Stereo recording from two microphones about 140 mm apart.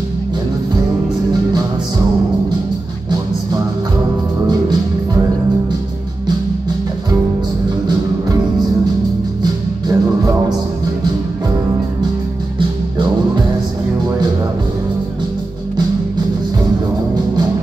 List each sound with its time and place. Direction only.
9.4 s music: 30° right (ahead or behind)